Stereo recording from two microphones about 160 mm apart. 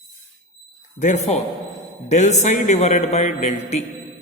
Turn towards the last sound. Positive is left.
turn(degrees=45)  # may be behind; listen again after turning